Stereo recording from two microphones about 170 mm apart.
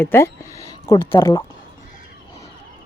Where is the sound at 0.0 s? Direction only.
15° left (ahead or behind).